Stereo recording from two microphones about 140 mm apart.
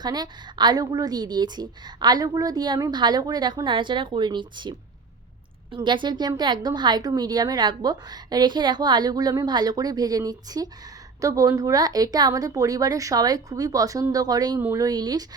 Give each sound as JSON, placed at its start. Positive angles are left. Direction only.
{"t": 0.0, "sound": "a woman's voice", "side_deg": -30}
{"t": 5.7, "sound": "a woman's voice", "side_deg": -35}